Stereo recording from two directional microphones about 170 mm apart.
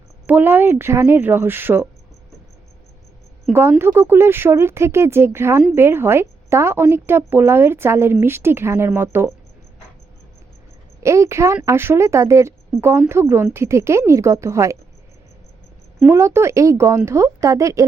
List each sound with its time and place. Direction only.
0.3 s a woman's voice: 10° right (ahead or behind)
3.5 s a woman's voice: 15° right (ahead or behind)
11.0 s a woman's voice: 15° right (ahead or behind)
16.0 s a woman's voice: 15° right (ahead or behind)